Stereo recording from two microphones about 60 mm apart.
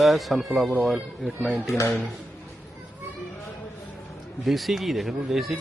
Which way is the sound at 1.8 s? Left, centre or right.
Left.